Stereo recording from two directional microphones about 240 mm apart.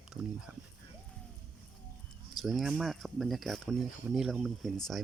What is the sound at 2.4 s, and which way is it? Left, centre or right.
Speech, centre.